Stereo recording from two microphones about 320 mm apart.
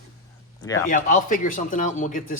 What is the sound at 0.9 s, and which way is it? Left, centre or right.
A man's voice, left.